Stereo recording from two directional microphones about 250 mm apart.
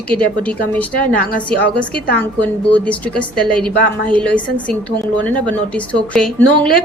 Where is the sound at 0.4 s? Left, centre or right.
Centre.